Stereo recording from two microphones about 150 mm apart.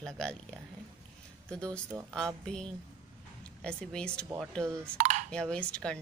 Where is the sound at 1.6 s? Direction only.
20° right (ahead or behind).